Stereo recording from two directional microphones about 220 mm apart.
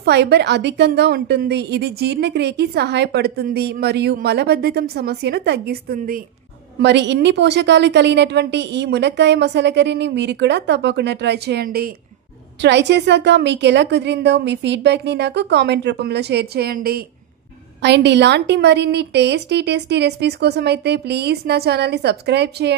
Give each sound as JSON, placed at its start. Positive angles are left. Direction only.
{"t": 0.0, "sound": "a woman's voice", "side_deg": -50}
{"t": 6.8, "sound": "a woman's voice", "side_deg": -50}